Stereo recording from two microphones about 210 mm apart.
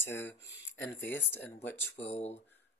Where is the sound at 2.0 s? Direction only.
30° left (ahead or behind).